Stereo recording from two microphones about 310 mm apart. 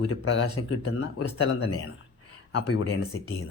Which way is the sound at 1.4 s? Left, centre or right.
Centre.